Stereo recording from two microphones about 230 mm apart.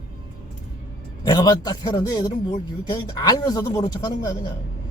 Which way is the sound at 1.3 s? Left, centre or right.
Centre.